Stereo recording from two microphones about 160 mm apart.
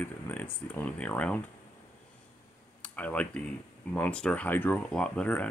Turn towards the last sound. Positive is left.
turn(degrees=10)  # may be behind; listen again after turning